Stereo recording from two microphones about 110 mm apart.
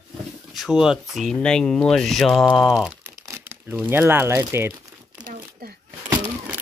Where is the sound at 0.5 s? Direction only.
5° right (ahead or behind).